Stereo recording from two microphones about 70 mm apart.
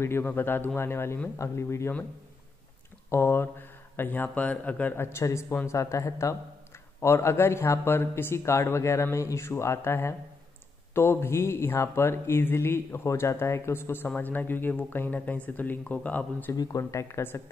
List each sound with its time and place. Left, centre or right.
0.0 s speech: left
3.1 s speech: left
4.9 s speech: left
14.0 s speech: left
16.5 s speech: left
17.1 s speech: left